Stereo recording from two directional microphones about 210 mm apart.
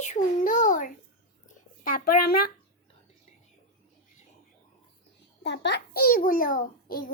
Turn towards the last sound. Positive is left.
turn(degrees=40)  # may be behind; listen again after turning